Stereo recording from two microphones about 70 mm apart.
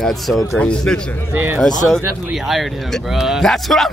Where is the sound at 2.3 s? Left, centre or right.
Centre.